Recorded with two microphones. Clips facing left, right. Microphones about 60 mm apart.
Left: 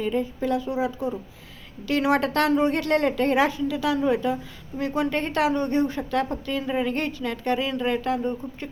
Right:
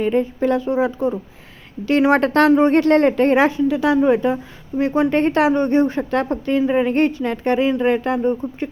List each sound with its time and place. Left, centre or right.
0.0 s speech: right